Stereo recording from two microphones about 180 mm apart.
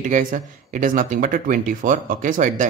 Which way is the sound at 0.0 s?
50° right (ahead or behind).